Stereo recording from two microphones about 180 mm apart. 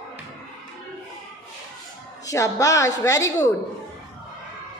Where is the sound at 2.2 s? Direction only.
15° left (ahead or behind).